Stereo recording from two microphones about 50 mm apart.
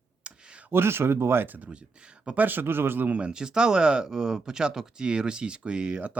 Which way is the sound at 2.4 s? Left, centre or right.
Right.